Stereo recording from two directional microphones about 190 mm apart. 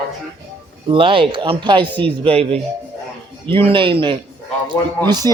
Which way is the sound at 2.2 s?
30° right (ahead or behind).